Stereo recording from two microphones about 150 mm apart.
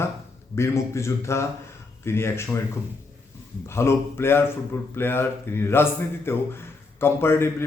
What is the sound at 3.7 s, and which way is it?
Speech, 15° left (ahead or behind).